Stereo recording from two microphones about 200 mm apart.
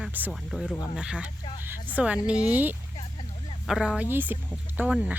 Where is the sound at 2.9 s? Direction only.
30° left (ahead or behind).